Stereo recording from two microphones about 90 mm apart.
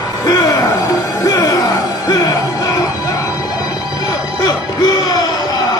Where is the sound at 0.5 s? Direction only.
40° left (ahead or behind).